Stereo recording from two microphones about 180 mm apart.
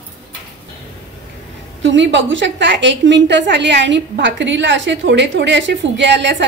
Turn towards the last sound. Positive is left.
turn(degrees=-80)